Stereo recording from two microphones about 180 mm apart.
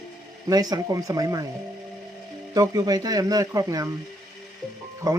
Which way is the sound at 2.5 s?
20° right (ahead or behind).